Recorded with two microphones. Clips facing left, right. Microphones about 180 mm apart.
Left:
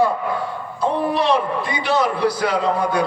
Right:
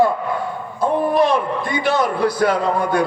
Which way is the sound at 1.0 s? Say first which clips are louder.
Right 3 dB; 50° right (ahead or behind).